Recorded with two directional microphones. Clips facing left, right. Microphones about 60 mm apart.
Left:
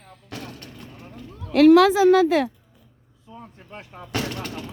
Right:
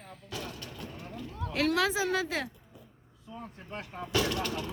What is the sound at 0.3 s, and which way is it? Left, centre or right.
Vehicle, left.